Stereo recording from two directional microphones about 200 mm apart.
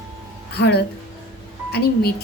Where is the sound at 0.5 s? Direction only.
55° left (ahead or behind).